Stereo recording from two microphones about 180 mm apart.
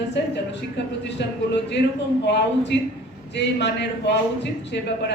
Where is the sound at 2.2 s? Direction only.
75° left (ahead or behind).